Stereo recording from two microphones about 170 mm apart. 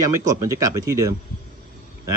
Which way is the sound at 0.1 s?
20° right (ahead or behind).